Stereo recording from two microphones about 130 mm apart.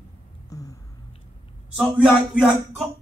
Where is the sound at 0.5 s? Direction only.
25° left (ahead or behind).